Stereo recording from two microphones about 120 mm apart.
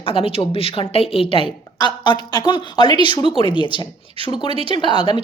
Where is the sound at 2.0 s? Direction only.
40° left (ahead or behind).